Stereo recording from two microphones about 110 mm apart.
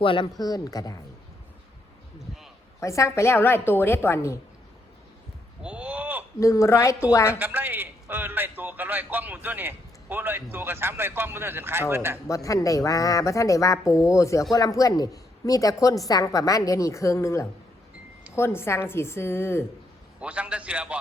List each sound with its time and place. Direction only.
0.0 s speech: 50° left (ahead or behind)
0.4 s a woman's voice: 35° left (ahead or behind)
2.8 s a woman's voice: 30° left (ahead or behind)
5.6 s a sound: 10° right (ahead or behind)
6.4 s a woman's voice: 30° left (ahead or behind)
7.3 s a man's voice: 15° right (ahead or behind)
12.3 s a woman's voice: 30° left (ahead or behind)
20.1 s a man's voice: 10° right (ahead or behind)